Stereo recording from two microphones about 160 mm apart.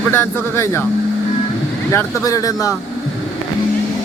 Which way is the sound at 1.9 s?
20° left (ahead or behind).